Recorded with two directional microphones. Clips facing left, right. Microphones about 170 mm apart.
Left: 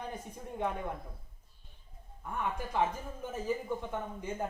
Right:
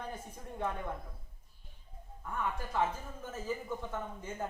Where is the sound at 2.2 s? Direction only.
15° left (ahead or behind).